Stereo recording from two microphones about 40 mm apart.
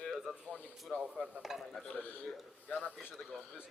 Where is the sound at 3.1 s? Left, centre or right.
Centre.